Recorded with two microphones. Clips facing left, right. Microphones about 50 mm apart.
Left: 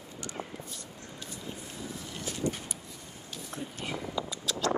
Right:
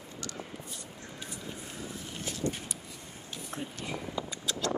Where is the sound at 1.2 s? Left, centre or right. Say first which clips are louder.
Left 1 dB; right.